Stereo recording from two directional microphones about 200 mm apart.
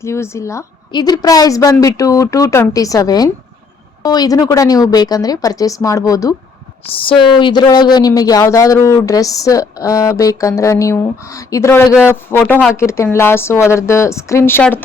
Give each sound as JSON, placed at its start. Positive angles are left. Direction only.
{"t": 0.0, "sound": "speech", "side_deg": 15}